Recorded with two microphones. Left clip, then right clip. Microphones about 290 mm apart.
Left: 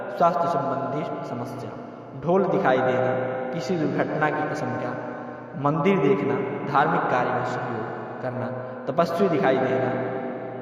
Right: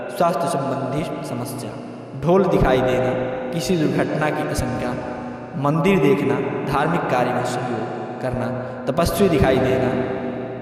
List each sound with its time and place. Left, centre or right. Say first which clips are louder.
0.2 s a man's voice: right 1 dB; right
2.2 s a man's voice: right 4 dB; right
8.9 s a man's voice: right 3 dB; right